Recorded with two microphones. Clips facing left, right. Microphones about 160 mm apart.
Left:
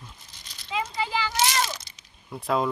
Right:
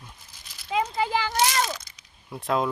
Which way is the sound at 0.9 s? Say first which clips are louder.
Right 3 dB; 50° right (ahead or behind).